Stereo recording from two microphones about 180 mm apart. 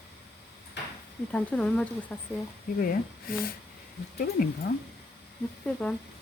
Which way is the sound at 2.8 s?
55° left (ahead or behind).